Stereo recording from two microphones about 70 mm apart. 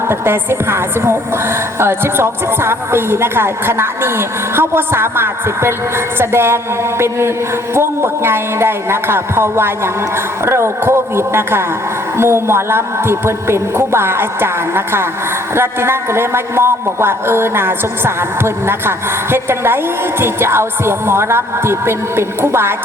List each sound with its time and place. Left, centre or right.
0.1 s a man's voice: right